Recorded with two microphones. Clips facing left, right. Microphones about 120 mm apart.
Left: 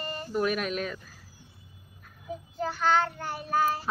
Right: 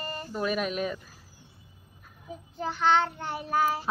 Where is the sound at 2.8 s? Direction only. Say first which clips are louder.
Right 2 dB; 25° right (ahead or behind).